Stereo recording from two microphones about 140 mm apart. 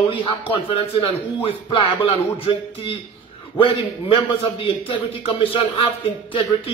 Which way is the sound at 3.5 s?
35° left (ahead or behind).